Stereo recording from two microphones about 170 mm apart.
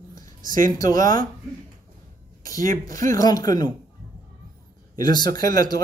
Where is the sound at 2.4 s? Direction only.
20° left (ahead or behind).